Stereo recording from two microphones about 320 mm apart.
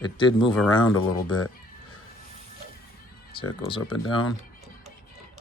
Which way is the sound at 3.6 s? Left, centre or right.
Centre.